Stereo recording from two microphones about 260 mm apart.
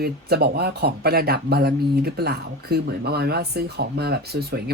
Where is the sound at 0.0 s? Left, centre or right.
Right.